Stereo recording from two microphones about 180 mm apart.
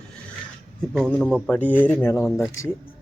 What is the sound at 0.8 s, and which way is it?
Speech, 5° left (ahead or behind).